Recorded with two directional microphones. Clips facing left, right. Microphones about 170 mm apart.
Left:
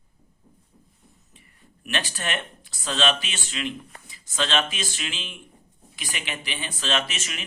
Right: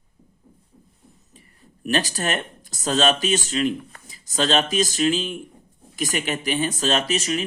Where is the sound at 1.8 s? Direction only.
40° right (ahead or behind).